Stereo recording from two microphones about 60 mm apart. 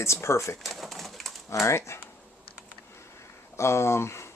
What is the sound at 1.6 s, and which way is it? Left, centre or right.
Speech, left.